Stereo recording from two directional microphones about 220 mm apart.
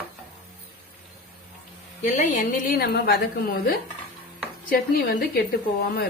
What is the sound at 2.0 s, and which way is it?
A woman's voice, 35° left (ahead or behind).